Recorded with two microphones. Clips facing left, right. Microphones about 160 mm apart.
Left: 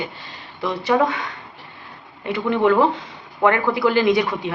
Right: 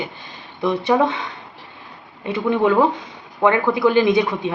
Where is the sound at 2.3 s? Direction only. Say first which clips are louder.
Right 1 dB; 15° right (ahead or behind).